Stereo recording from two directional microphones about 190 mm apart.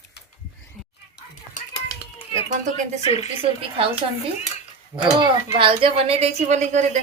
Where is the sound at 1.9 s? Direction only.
30° left (ahead or behind).